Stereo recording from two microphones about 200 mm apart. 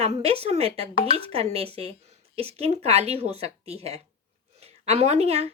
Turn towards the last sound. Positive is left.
turn(degrees=-30)  # may be behind; listen again after turning